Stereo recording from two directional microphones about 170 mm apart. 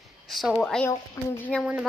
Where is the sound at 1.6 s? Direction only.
5° right (ahead or behind).